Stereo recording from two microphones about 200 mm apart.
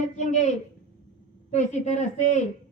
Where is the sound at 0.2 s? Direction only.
35° left (ahead or behind).